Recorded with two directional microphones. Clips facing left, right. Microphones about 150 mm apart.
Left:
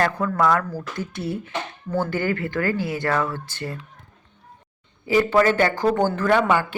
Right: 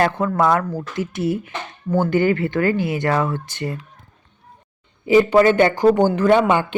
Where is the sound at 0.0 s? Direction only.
25° right (ahead or behind).